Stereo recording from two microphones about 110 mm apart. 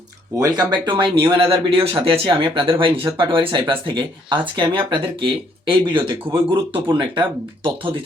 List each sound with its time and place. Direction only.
0.4 s speech: 40° right (ahead or behind)